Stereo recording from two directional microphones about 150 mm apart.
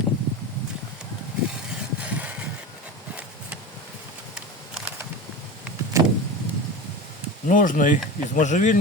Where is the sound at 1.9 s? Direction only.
10° right (ahead or behind).